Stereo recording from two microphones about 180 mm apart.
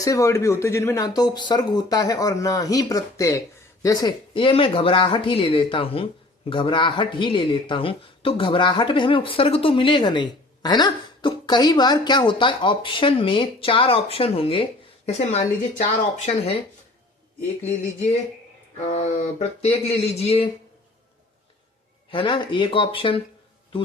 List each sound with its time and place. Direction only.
0.0 s speech: 15° left (ahead or behind); by 16.6 s 40° left (ahead or behind)
18.9 s a sound: 40° left (ahead or behind)
22.1 s speech: 30° left (ahead or behind)